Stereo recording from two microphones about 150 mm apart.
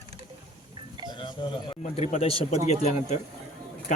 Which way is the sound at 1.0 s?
30° left (ahead or behind).